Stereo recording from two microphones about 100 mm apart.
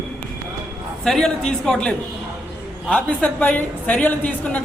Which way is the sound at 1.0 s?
5° left (ahead or behind).